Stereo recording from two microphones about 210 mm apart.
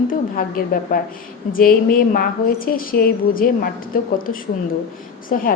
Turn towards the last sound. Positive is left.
turn(degrees=40)  # may be behind; listen again after turning